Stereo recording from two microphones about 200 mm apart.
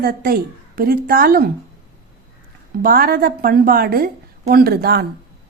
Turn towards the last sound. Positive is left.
turn(degrees=-50)  # may be behind; listen again after turning